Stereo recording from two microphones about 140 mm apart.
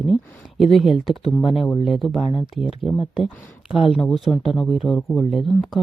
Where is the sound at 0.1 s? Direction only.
Centre (ahead or behind).